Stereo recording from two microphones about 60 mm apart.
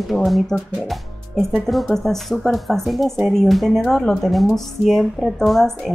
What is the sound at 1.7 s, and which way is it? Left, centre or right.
Speech, centre.